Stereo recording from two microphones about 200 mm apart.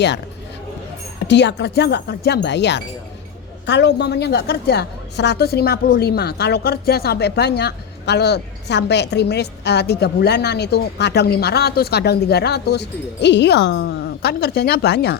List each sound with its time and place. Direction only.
1.2 s a woman's voice: 60° left (ahead or behind)